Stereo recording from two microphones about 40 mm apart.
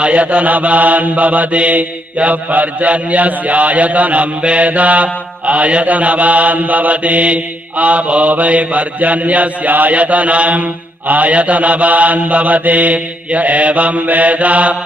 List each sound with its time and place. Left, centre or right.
0.0 s mantra: right